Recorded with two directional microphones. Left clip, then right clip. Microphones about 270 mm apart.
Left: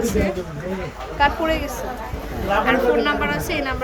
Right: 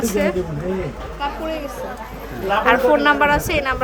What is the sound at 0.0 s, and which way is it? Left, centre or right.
Speech, centre.